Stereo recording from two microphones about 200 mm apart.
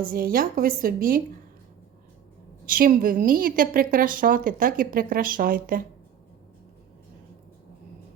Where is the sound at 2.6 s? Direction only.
45° right (ahead or behind).